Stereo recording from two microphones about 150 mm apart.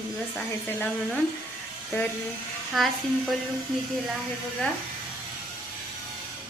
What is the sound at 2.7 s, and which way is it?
Speech, centre (ahead or behind).